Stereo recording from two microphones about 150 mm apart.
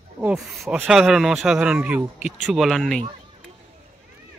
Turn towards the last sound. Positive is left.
turn(degrees=0)  # may be behind; listen again after turning